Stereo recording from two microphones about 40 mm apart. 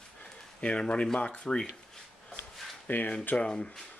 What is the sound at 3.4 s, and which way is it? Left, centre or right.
Speech, left.